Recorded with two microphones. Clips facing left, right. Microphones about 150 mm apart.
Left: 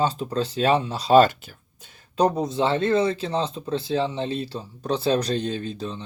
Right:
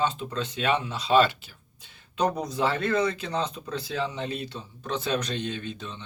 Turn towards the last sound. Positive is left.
turn(degrees=35)  # may be behind; listen again after turning